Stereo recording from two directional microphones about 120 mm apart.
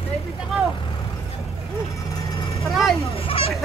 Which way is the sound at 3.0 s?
55° left (ahead or behind).